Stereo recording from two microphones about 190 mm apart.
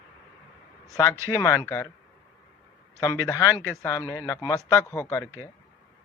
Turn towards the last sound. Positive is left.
turn(degrees=15)  # may be behind; listen again after turning